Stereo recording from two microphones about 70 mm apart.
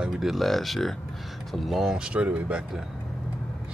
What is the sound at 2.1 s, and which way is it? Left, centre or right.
Speech, centre.